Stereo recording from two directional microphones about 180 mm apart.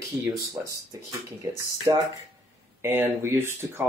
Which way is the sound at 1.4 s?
20° right (ahead or behind).